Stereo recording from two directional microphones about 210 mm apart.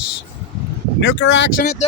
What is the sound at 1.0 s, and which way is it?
Speech, 60° left (ahead or behind).